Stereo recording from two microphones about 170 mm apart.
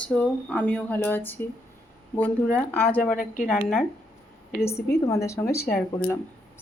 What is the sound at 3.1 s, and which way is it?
Speech, 55° left (ahead or behind).